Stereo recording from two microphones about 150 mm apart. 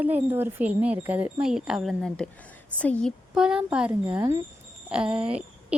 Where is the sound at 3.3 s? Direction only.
5° right (ahead or behind).